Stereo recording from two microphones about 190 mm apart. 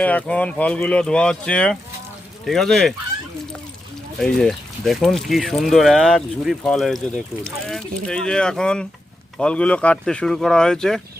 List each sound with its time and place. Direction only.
0.0 s speech: 10° left (ahead or behind)
4.2 s speech: centre (ahead or behind)